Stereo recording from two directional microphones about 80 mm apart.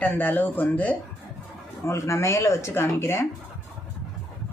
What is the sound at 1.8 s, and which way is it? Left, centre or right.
Speech, left.